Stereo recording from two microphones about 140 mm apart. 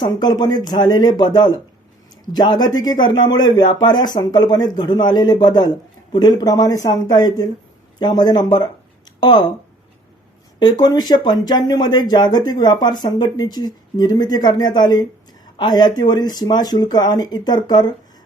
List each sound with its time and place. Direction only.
0.0 s speech: 30° left (ahead or behind)
10.6 s speech: 30° left (ahead or behind)